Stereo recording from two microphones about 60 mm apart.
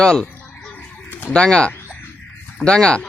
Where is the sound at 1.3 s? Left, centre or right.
Centre.